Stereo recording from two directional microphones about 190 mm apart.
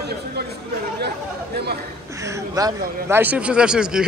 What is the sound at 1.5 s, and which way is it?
Chatter, 55° right (ahead or behind).